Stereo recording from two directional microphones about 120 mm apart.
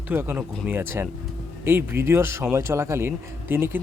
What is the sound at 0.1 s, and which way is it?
A man's voice, 15° right (ahead or behind).